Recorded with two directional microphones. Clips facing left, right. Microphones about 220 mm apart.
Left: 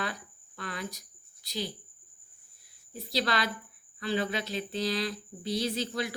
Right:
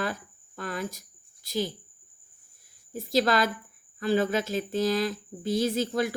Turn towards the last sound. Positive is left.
turn(degrees=-45)  # may be behind; listen again after turning